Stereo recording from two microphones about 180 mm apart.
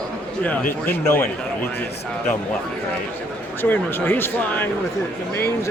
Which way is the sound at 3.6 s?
10° left (ahead or behind).